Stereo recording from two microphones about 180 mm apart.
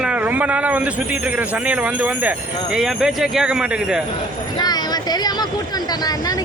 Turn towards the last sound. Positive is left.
turn(degrees=20)  # may be behind; listen again after turning